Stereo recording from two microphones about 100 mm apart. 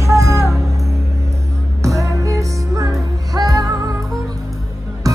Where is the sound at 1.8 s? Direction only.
35° right (ahead or behind).